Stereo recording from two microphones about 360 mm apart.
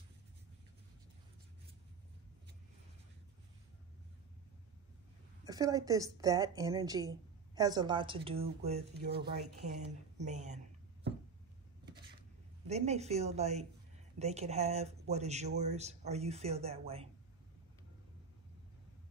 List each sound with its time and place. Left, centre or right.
5.4 s a woman's voice: centre
12.6 s a woman's voice: centre